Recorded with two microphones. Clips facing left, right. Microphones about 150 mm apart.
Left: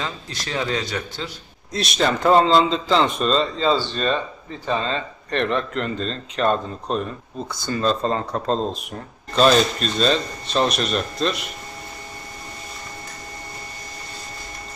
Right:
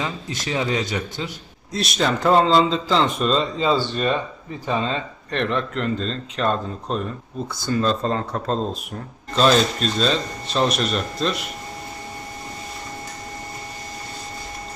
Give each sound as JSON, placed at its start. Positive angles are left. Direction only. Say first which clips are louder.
{"t": 0.0, "sound": "a man's voice", "louder": "right 3 dB", "side_deg": -20}
{"t": 1.7, "sound": "a man's voice", "louder": "left 1 dB", "side_deg": 0}